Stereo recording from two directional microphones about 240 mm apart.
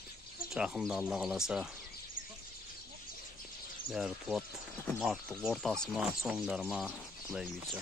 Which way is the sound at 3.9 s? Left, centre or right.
Centre.